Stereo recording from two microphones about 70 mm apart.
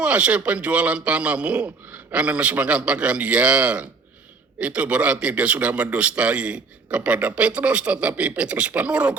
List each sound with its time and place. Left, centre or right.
0.0 s a man's voice: centre